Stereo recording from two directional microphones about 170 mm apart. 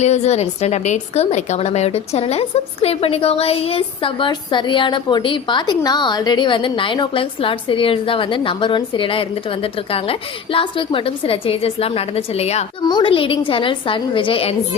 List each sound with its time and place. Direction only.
0.0 s a woman's voice: 40° left (ahead or behind)